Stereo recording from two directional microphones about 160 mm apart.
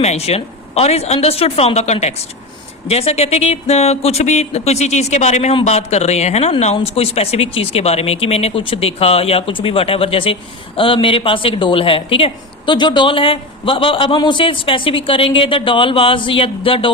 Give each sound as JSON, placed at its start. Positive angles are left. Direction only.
{"t": 0.0, "sound": "a woman's voice", "side_deg": 40}